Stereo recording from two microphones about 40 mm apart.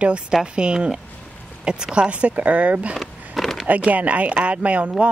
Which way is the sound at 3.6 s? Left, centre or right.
Right.